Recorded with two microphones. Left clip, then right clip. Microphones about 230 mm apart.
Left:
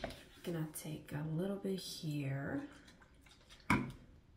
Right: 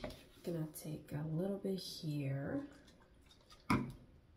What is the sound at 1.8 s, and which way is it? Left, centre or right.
Speech, left.